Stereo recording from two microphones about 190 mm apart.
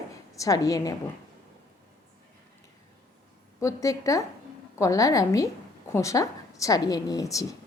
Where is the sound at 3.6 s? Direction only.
15° left (ahead or behind).